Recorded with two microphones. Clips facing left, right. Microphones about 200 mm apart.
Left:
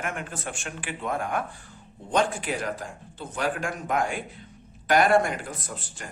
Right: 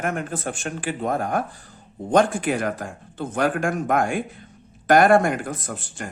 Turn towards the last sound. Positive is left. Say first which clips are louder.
# right 6 dB
turn(degrees=-50)  # may be behind; listen again after turning